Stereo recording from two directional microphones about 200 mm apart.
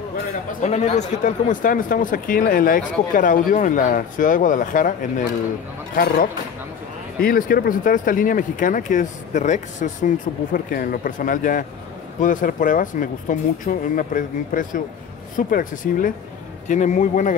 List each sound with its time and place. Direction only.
0.5 s speech: 35° left (ahead or behind)
7.2 s speech: 45° left (ahead or behind)